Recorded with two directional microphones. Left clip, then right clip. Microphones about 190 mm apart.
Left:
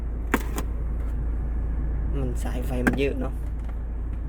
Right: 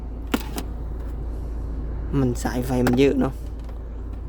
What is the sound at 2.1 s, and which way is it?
Speech, 50° right (ahead or behind).